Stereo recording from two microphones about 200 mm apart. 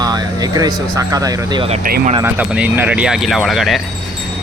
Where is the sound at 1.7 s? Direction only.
40° right (ahead or behind).